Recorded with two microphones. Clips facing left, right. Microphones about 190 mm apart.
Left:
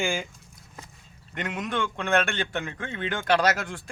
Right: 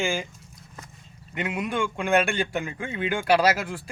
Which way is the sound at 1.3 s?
5° right (ahead or behind).